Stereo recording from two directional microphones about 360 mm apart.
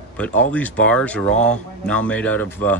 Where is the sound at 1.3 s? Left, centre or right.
Centre.